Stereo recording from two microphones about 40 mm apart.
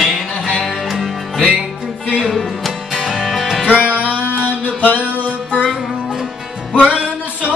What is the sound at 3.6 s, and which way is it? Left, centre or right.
Music, right.